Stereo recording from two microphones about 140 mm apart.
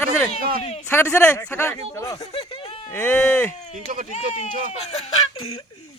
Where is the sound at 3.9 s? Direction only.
65° right (ahead or behind).